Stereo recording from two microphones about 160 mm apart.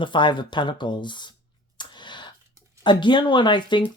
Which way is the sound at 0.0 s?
30° left (ahead or behind).